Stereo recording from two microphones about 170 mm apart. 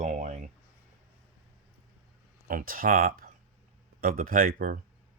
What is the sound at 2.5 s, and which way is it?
Speech, 55° right (ahead or behind).